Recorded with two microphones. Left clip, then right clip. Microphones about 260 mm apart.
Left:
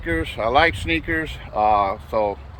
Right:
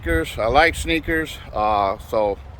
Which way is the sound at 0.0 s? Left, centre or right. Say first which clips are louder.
Right 2 dB; centre.